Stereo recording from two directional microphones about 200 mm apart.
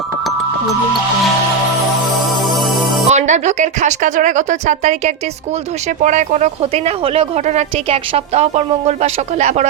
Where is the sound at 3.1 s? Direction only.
35° right (ahead or behind).